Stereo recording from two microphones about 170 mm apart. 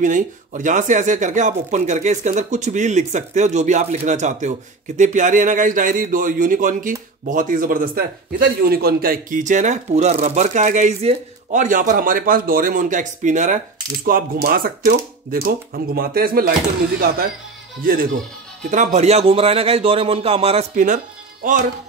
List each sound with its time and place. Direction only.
0.0 s speech: 50° right (ahead or behind)
14.0 s speech: 60° right (ahead or behind)
17.8 s speech: 55° right (ahead or behind)
18.7 s a man's voice: 45° right (ahead or behind)
20.7 s speech: 50° right (ahead or behind)